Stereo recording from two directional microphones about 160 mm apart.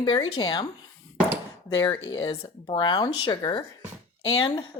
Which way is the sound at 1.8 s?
20° left (ahead or behind).